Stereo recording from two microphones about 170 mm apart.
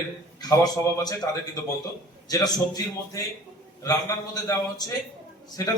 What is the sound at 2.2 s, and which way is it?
Speech, 20° left (ahead or behind).